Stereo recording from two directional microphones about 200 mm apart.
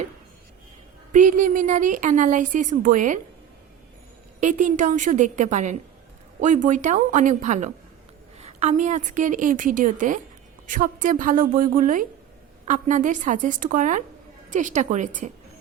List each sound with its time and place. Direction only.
1.1 s a woman's voice: 40° right (ahead or behind)
4.4 s a woman's voice: 40° right (ahead or behind)